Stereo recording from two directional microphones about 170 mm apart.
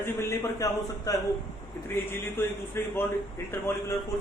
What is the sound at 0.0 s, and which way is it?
Speech, 15° left (ahead or behind).